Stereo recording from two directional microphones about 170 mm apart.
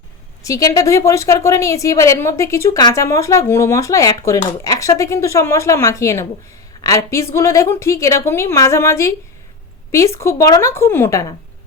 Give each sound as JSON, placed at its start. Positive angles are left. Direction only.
{"t": 0.4, "sound": "a woman's voice", "side_deg": 20}